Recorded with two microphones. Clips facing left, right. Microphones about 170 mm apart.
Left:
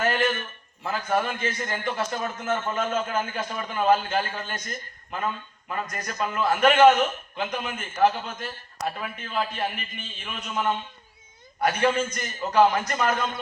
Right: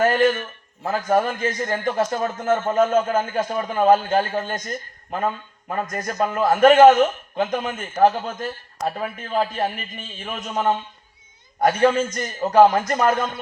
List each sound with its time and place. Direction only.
0.0 s a man's voice: 40° right (ahead or behind)